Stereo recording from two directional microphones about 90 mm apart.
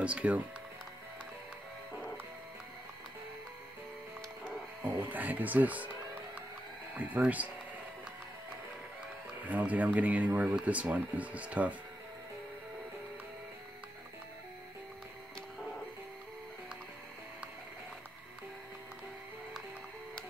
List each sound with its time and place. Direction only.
0.0 s speech: 15° right (ahead or behind)
5.1 s speech: 20° right (ahead or behind)
6.9 s speech: 20° right (ahead or behind)
9.5 s speech: 15° right (ahead or behind)